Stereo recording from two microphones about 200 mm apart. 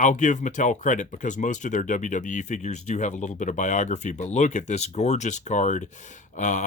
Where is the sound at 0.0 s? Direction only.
35° left (ahead or behind).